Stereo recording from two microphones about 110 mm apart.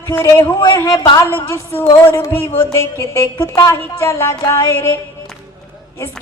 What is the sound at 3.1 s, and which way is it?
A woman's voice, 25° left (ahead or behind).